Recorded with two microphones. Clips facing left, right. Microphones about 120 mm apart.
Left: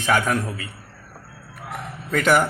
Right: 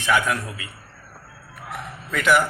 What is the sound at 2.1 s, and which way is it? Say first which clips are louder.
Speech: left 1 dB; 40° left (ahead or behind).